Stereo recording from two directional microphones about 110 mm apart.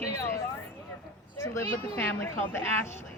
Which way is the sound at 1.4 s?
25° left (ahead or behind).